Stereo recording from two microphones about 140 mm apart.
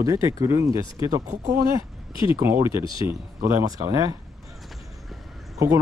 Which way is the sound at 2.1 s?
35° left (ahead or behind).